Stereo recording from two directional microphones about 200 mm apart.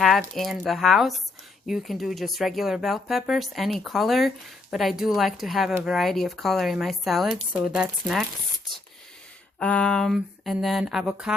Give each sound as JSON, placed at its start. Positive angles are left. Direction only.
{"t": 0.0, "sound": "speech", "side_deg": 0}
{"t": 9.6, "sound": "speech", "side_deg": 5}